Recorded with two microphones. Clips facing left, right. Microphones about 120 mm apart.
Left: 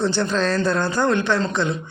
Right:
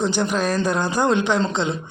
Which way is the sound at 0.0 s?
15° right (ahead or behind).